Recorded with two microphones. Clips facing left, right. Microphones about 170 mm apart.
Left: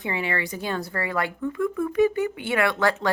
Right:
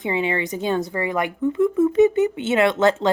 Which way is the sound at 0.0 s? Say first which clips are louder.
Right 5 dB; 20° right (ahead or behind).